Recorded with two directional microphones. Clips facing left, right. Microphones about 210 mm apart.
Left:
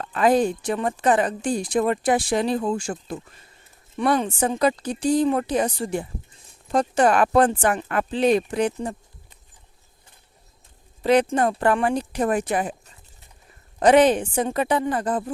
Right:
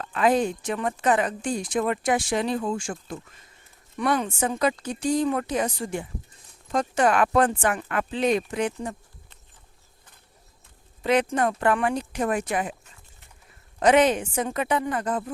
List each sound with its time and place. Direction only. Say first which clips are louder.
0.0 s a woman's voice: left 3 dB; 40° left (ahead or behind)
11.0 s a woman's voice: left 4 dB; 35° left (ahead or behind)